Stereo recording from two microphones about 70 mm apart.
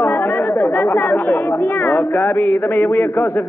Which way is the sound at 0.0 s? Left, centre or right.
Left.